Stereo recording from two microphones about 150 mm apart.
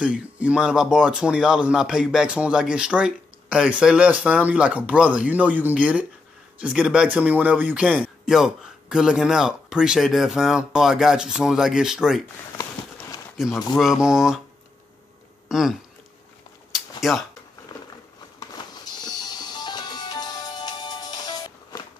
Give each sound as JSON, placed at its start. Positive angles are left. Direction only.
{"t": 0.0, "sound": "speech", "side_deg": -5}
{"t": 12.5, "sound": "a sound", "side_deg": 20}
{"t": 13.7, "sound": "speech", "side_deg": -5}
{"t": 15.4, "sound": "speech", "side_deg": 0}
{"t": 16.7, "sound": "a sound", "side_deg": 0}
{"t": 18.4, "sound": "music", "side_deg": 25}